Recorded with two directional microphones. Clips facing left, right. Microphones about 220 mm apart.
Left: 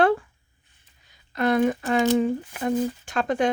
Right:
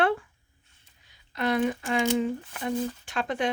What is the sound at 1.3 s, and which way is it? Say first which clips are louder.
Speech: left 5 dB; 45° left (ahead or behind).